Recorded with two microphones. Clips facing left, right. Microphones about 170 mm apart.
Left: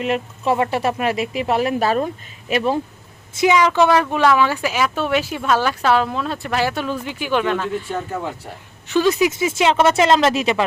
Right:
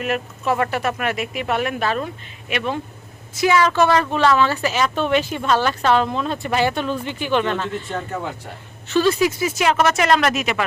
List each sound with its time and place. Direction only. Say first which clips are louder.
0.0 s speech: left 2 dB; 25° left (ahead or behind)
3.4 s speech: left 1 dB; 15° left (ahead or behind)